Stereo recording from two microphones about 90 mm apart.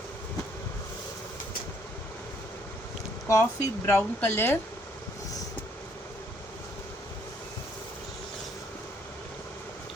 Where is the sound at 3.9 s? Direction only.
25° left (ahead or behind).